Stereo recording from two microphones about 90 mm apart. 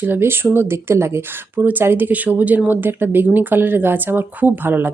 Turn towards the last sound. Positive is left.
turn(degrees=-20)  # may be behind; listen again after turning